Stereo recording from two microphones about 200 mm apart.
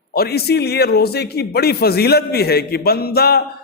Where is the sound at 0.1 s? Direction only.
50° left (ahead or behind).